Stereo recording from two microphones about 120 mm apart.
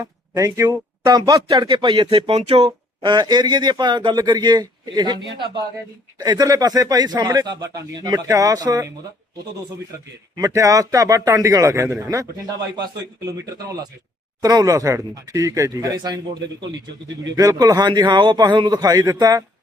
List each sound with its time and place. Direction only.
0.0 s speech: 25° right (ahead or behind); by 2.6 s 55° right (ahead or behind)
2.6 s speech: 40° right (ahead or behind)
10.3 s speech: 30° right (ahead or behind)
13.2 s speech: 30° right (ahead or behind)